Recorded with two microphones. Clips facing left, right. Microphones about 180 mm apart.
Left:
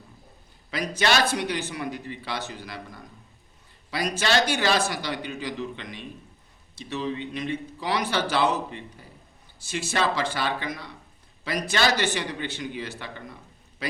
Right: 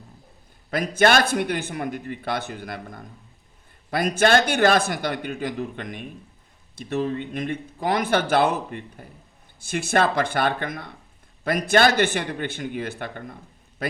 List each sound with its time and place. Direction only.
0.7 s speech: 50° right (ahead or behind)